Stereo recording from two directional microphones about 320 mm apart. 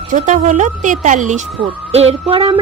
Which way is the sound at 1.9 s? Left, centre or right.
Centre.